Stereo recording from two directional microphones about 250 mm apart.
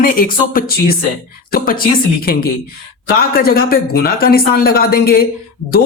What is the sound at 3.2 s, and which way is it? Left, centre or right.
Speech, left.